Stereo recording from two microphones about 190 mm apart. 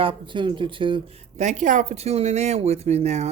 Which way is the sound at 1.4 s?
40° right (ahead or behind).